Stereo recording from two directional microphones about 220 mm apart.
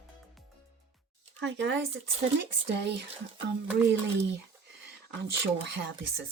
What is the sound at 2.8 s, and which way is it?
Speech, 50° right (ahead or behind).